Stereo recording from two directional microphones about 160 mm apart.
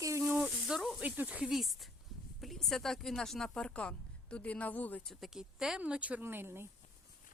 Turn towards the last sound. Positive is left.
turn(degrees=-15)  # may be behind; listen again after turning